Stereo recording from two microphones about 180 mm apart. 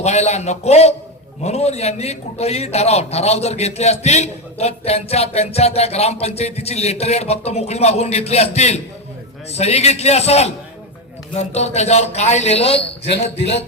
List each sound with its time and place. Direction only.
0.0 s a man's voice: 40° left (ahead or behind)